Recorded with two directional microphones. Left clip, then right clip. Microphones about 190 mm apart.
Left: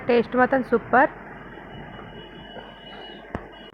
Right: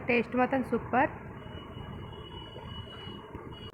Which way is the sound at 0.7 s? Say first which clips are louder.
Left 9 dB; 15° left (ahead or behind).